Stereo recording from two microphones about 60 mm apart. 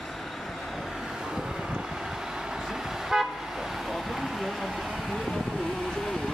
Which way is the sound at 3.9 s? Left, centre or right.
Centre.